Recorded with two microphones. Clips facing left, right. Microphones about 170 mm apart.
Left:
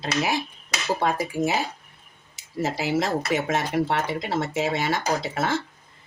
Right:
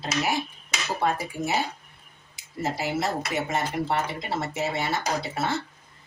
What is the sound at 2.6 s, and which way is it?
Speech, 90° left.